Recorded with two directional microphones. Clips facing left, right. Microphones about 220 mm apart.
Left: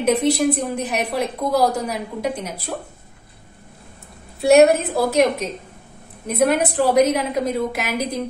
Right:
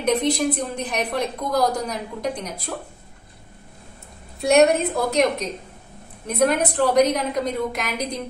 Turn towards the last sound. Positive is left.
turn(degrees=5)  # may be behind; listen again after turning